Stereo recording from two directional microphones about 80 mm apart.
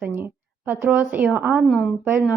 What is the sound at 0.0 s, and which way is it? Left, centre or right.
A woman's voice, right.